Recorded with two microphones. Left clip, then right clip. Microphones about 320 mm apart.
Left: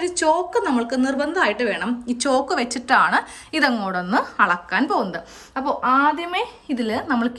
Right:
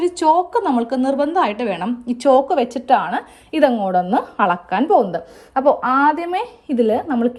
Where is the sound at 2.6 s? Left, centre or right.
Centre.